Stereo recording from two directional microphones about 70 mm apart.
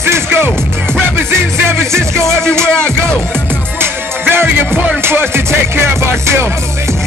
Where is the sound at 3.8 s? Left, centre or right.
Right.